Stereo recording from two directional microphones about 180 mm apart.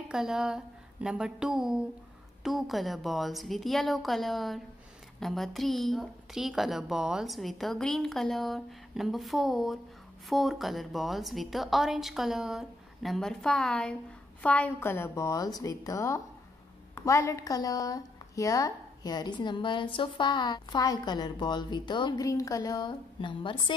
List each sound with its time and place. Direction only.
0.1 s a woman's voice: 5° right (ahead or behind); by 23.7 s 25° left (ahead or behind)